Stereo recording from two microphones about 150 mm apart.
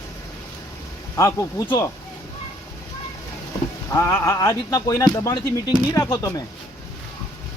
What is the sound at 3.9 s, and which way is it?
Speech, 20° left (ahead or behind).